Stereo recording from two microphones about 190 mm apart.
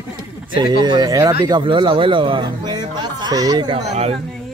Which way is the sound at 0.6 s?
25° right (ahead or behind).